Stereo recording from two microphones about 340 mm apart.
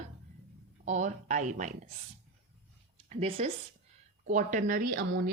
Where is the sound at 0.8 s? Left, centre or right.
Right.